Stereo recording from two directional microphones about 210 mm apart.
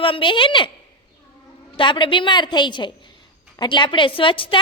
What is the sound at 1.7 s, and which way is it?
A woman's voice, 25° left (ahead or behind).